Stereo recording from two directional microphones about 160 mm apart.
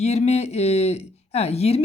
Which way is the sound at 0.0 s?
45° left (ahead or behind).